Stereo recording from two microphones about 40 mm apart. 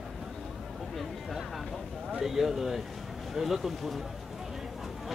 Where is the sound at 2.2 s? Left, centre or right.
Centre.